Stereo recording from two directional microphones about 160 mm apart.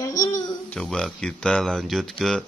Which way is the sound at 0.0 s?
20° left (ahead or behind).